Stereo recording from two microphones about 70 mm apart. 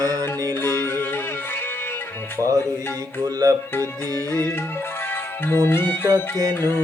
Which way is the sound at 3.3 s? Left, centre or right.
Right.